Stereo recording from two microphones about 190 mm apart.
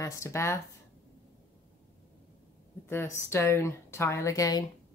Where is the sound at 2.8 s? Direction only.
10° left (ahead or behind).